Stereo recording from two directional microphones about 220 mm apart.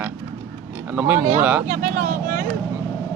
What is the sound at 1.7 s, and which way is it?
Speech, 35° right (ahead or behind).